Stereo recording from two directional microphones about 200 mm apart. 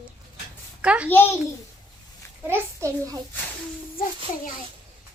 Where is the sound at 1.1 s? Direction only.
10° left (ahead or behind).